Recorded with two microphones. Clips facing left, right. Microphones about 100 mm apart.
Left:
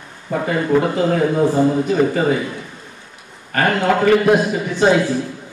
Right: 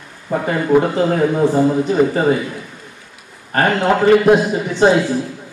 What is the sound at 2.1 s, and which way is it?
Speech, 30° right (ahead or behind).